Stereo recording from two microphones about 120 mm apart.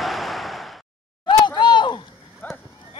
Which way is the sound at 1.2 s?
40° left (ahead or behind).